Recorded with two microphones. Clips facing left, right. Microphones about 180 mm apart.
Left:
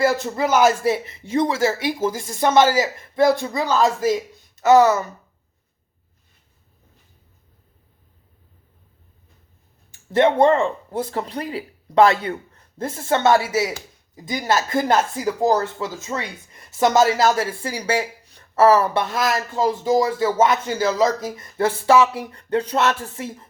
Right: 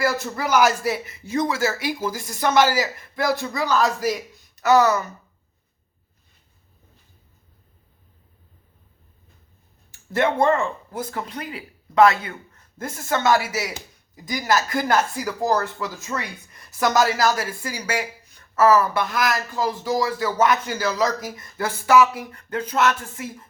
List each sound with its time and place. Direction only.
0.0 s speech: 25° left (ahead or behind)
10.2 s speech: 25° left (ahead or behind)